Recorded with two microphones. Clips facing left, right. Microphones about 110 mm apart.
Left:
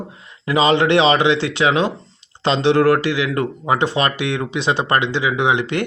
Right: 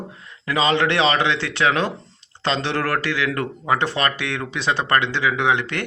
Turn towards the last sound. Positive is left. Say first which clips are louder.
# left 3 dB
turn(degrees=20)  # may be behind; listen again after turning